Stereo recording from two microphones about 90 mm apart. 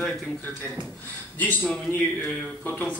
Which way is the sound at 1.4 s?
20° left (ahead or behind).